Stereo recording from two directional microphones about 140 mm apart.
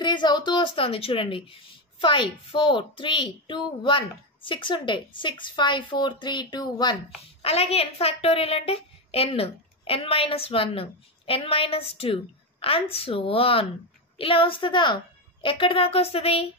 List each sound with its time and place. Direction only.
0.0 s a woman's voice: 30° left (ahead or behind)
7.4 s a woman's voice: 45° left (ahead or behind)